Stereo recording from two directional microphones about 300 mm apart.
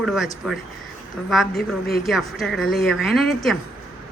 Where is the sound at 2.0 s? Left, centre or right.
Centre.